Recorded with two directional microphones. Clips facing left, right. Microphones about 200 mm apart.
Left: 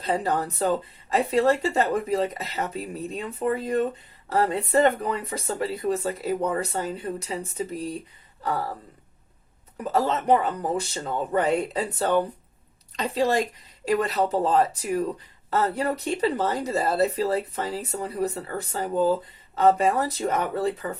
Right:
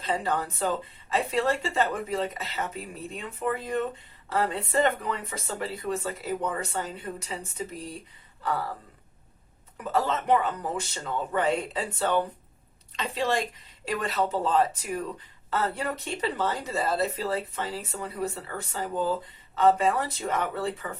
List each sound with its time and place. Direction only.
0.0 s speech: 40° left (ahead or behind)
9.7 s speech: 35° left (ahead or behind)